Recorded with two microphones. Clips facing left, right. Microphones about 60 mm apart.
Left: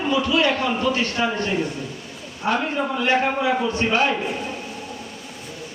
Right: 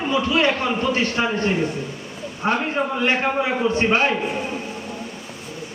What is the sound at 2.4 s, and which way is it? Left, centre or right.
A man's voice, right.